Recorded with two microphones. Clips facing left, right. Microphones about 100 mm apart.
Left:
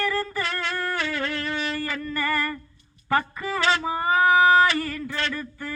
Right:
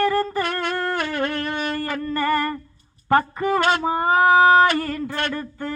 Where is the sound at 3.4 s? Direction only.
50° right (ahead or behind).